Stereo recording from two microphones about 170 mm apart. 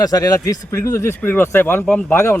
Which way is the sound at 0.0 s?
20° left (ahead or behind).